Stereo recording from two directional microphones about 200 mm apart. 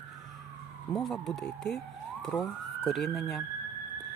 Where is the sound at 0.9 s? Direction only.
Centre (ahead or behind).